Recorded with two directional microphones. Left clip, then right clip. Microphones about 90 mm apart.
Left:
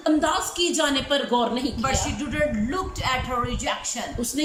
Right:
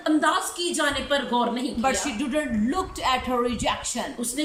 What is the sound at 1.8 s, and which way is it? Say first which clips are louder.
Speech: right 3 dB; 45° right (ahead or behind).